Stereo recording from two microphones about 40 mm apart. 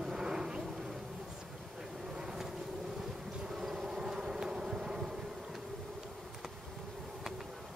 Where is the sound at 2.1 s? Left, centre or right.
Centre.